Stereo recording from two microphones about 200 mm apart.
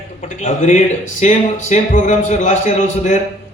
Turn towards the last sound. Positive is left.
turn(degrees=35)  # may be behind; listen again after turning